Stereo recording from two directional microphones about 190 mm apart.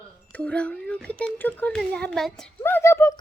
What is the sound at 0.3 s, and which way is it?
A child's voice, 5° left (ahead or behind).